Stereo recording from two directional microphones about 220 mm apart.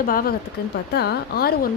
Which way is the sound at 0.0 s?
40° left (ahead or behind).